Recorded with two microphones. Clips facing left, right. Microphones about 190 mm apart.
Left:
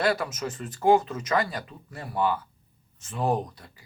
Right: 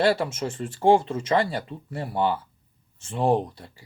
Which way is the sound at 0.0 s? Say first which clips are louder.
Right 4 dB; 30° right (ahead or behind).